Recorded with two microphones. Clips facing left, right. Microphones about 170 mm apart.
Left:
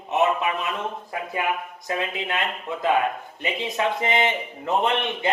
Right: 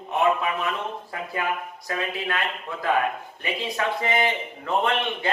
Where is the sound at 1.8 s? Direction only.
20° left (ahead or behind).